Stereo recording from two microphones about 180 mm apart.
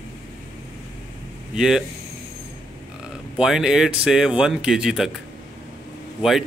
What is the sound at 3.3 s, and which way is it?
Speech, 5° right (ahead or behind).